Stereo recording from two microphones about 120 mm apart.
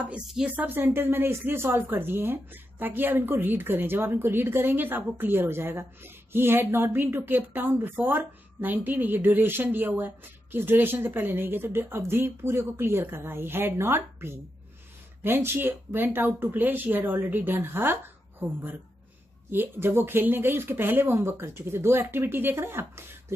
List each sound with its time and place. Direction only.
0.0 s speech: 5° right (ahead or behind)